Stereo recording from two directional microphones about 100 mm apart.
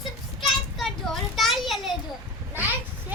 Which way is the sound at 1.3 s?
Centre (ahead or behind).